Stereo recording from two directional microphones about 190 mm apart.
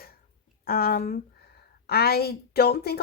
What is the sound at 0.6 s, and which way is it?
A woman's voice, 55° left (ahead or behind).